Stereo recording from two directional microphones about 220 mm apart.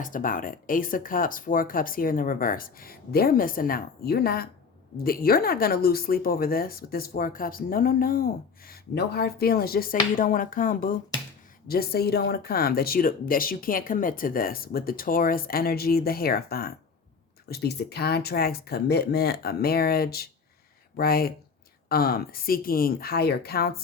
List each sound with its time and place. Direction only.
0.0 s speech: 40° left (ahead or behind)